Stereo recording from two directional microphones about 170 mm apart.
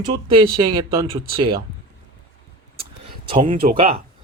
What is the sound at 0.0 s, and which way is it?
Speech, 25° right (ahead or behind).